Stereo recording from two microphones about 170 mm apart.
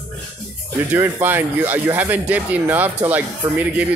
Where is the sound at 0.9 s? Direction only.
10° right (ahead or behind).